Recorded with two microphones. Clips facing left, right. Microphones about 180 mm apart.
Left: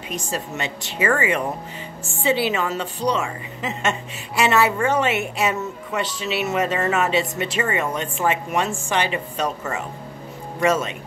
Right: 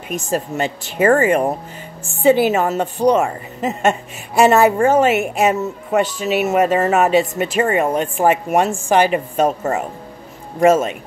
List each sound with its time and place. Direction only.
0.1 s speech: 50° right (ahead or behind)